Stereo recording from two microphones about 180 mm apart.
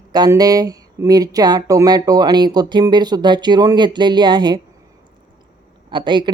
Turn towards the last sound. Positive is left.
turn(degrees=-25)  # may be behind; listen again after turning